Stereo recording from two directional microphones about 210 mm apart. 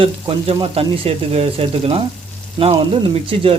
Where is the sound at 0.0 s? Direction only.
25° right (ahead or behind).